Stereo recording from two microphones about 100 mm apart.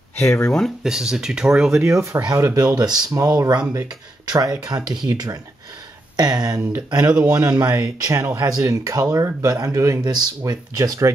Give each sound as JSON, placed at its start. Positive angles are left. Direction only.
{"t": 0.2, "sound": "speech", "side_deg": 30}
{"t": 0.8, "sound": "speech", "side_deg": -5}
{"t": 1.9, "sound": "speech", "side_deg": -30}
{"t": 10.0, "sound": "speech", "side_deg": -45}